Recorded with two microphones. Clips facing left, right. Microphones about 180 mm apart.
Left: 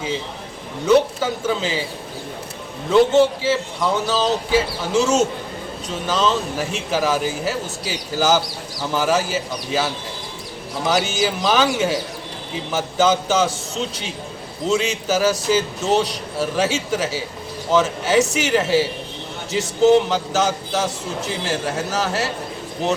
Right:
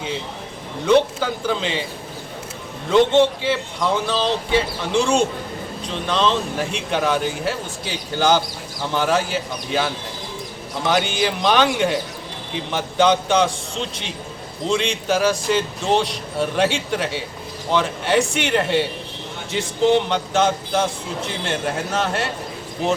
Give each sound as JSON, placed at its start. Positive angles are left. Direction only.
{"t": 0.9, "sound": "a man's voice", "side_deg": 5}
{"t": 2.9, "sound": "a man's voice", "side_deg": 0}